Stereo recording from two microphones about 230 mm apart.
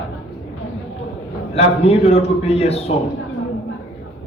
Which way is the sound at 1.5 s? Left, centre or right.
Left.